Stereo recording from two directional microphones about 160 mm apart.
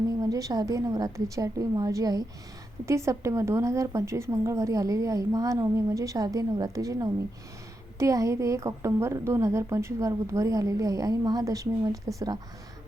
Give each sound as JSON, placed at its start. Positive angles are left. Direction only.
{"t": 0.2, "sound": "a woman's voice", "side_deg": -20}